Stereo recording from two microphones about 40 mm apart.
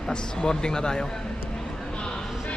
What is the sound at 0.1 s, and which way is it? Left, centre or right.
Speech, centre.